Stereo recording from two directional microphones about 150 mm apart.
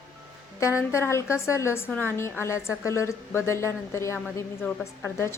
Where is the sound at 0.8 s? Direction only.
20° left (ahead or behind).